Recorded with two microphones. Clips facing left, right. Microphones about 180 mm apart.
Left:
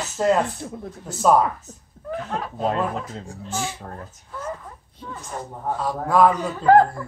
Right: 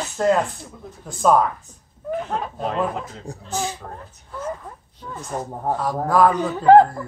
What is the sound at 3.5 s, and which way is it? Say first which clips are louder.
Speech: right 2 dB; 15° right (ahead or behind).